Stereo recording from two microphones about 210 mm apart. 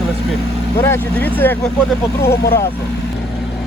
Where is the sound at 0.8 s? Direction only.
10° left (ahead or behind).